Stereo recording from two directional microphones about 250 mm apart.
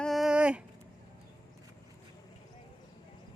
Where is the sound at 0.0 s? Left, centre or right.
Centre.